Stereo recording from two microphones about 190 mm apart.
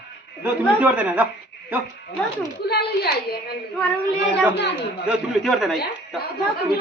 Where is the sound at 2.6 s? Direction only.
55° left (ahead or behind).